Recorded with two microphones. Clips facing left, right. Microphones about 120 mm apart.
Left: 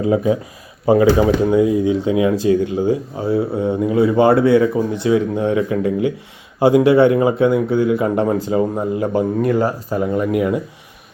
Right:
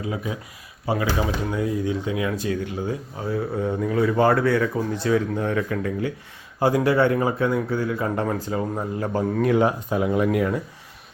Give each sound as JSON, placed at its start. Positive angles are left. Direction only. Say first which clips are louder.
{"t": 0.0, "sound": "speech", "louder": "left 13 dB", "side_deg": 30}
{"t": 7.1, "sound": "speech", "louder": "left 7 dB", "side_deg": 15}
{"t": 7.3, "sound": "speech", "louder": "left 8 dB", "side_deg": 25}
{"t": 9.4, "sound": "speech", "louder": "left 2 dB", "side_deg": 0}